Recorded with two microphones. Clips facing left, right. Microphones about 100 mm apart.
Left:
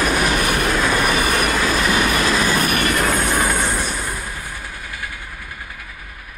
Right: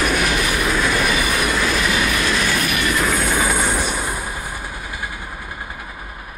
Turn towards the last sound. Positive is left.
turn(degrees=-25)  # may be behind; listen again after turning